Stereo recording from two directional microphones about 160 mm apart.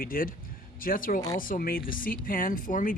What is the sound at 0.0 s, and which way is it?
Speech, 60° left (ahead or behind).